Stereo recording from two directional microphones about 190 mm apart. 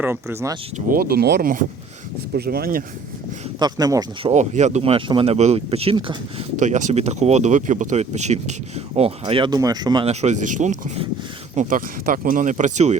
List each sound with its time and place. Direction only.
0.0 s speech: 10° right (ahead or behind)
0.9 s speech: 50° right (ahead or behind)
3.6 s speech: 20° right (ahead or behind)
4.3 s speech: 40° right (ahead or behind)
6.6 s speech: 40° right (ahead or behind); by 10.1 s 20° right (ahead or behind)
10.1 s speech: 35° right (ahead or behind)